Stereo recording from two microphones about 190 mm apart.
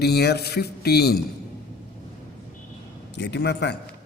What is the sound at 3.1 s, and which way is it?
Speech, 65° left (ahead or behind).